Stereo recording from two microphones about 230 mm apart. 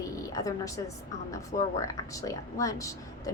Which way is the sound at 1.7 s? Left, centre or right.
Centre.